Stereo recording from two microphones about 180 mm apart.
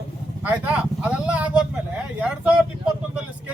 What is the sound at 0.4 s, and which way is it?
Speech, 10° right (ahead or behind).